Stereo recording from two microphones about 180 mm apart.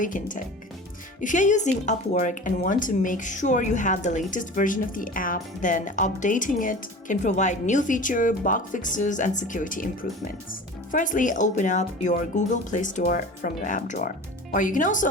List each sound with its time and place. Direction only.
0.0 s a woman's voice: 45° left (ahead or behind)